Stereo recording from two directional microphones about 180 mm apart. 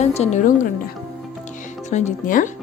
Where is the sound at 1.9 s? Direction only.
45° left (ahead or behind).